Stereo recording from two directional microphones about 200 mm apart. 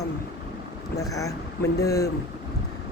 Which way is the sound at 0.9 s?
15° left (ahead or behind).